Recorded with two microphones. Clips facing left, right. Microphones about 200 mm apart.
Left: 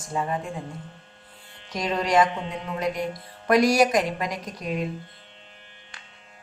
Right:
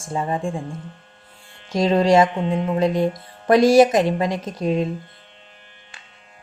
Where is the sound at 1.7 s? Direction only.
30° right (ahead or behind).